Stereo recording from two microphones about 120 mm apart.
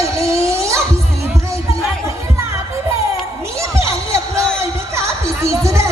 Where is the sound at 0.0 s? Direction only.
25° right (ahead or behind).